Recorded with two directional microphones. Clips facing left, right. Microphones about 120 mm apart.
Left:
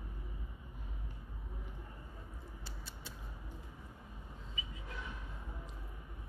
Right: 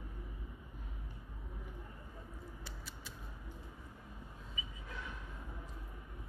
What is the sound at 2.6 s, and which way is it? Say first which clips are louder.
Rodents: even; 30° left (ahead or behind).